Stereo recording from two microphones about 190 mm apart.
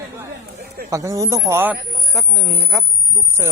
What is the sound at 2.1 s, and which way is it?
Speech, centre (ahead or behind).